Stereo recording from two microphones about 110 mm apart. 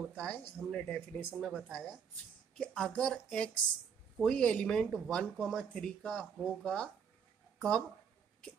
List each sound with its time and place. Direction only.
0.0 s speech: centre (ahead or behind)